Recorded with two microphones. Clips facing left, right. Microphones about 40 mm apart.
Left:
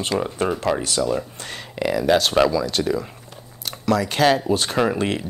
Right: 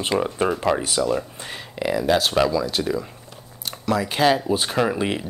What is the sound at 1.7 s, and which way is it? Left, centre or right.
Speech, centre.